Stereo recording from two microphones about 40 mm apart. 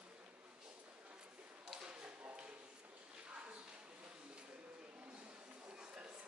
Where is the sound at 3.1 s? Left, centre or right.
Right.